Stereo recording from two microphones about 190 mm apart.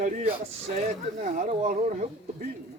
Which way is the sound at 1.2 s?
40° right (ahead or behind).